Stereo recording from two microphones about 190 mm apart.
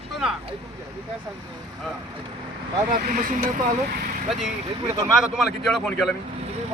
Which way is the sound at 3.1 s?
45° right (ahead or behind).